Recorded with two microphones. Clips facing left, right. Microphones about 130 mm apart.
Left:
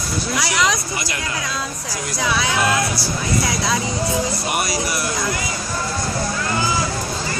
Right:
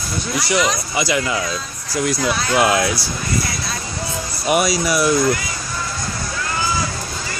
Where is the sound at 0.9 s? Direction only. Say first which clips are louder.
Right 7 dB; 90° right.